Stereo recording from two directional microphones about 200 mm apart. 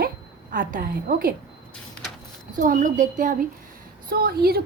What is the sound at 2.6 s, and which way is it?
A woman's voice, 40° right (ahead or behind).